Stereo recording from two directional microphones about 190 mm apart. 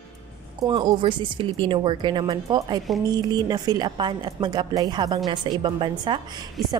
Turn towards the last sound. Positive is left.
turn(degrees=-25)  # may be behind; listen again after turning